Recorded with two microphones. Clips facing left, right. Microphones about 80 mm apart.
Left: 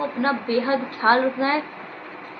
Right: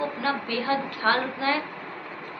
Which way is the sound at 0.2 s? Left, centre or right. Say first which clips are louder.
Left 6 dB; left.